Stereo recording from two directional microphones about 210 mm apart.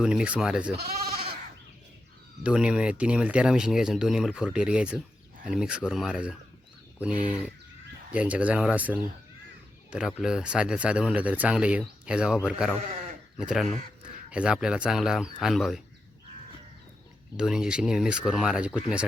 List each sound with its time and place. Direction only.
0.0 s speech: 5° right (ahead or behind)
0.8 s speech: 45° right (ahead or behind)
2.4 s speech: 5° right (ahead or behind)
17.3 s speech: 5° right (ahead or behind)